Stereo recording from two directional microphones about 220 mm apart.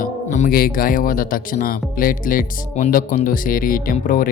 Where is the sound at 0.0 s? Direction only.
35° left (ahead or behind).